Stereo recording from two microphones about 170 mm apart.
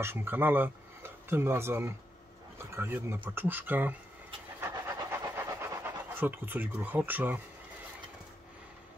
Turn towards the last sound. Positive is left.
turn(degrees=-10)  # may be behind; listen again after turning